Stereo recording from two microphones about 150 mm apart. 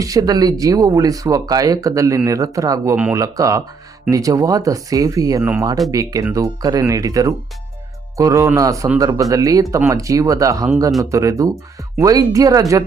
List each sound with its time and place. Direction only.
0.0 s speech: 25° right (ahead or behind)
5.4 s speech: 15° right (ahead or behind)